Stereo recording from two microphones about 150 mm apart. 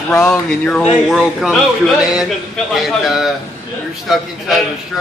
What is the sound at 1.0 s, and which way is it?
Speech, centre (ahead or behind).